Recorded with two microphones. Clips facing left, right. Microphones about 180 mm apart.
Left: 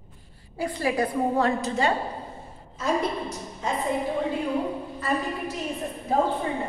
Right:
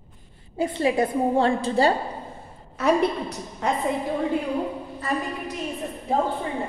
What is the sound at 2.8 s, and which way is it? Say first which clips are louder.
Speech: right 5 dB; 65° right (ahead or behind).